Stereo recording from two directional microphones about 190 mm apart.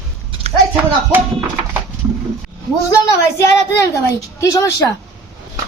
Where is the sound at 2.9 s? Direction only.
15° left (ahead or behind).